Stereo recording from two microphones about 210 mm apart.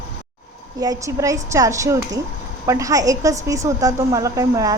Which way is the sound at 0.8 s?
15° right (ahead or behind).